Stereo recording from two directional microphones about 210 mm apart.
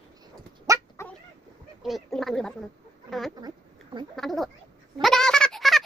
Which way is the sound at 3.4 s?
20° right (ahead or behind).